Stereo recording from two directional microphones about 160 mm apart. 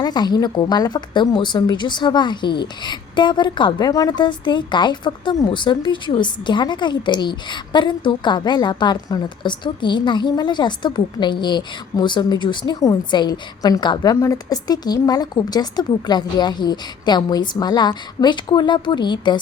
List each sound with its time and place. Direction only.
0.0 s a woman's voice: 25° left (ahead or behind)